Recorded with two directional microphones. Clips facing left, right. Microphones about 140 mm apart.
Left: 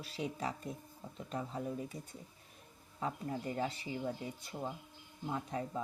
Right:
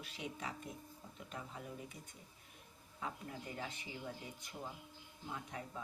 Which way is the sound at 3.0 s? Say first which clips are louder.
Left 8 dB; 35° left (ahead or behind).